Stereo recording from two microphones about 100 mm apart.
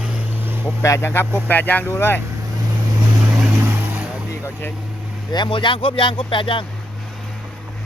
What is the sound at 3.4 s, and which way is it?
Vehicle, 15° right (ahead or behind).